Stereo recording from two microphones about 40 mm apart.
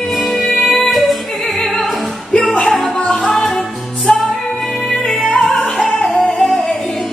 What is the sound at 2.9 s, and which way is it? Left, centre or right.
Music, left.